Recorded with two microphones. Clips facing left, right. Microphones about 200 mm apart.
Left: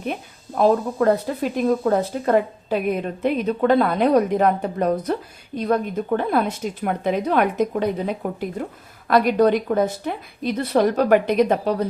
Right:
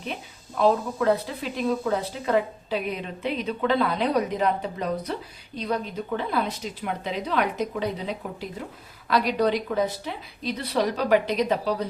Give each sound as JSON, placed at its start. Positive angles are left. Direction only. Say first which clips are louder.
{"t": 0.0, "sound": "speech", "louder": "left 6 dB", "side_deg": 50}